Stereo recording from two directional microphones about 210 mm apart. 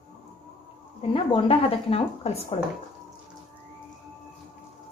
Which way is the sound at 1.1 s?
25° left (ahead or behind).